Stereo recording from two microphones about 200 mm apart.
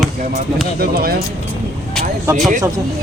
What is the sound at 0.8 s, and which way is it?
Speech, 50° right (ahead or behind).